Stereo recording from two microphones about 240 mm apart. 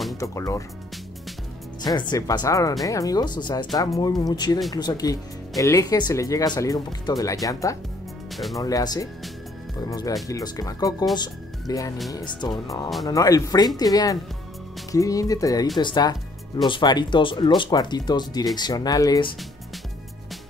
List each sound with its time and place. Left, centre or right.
0.2 s speech: centre
1.8 s speech: centre